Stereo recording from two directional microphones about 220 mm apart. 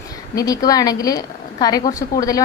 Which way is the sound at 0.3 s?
15° left (ahead or behind).